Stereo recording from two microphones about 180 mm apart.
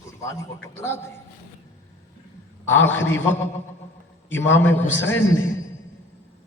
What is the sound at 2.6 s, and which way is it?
Speech, 10° left (ahead or behind).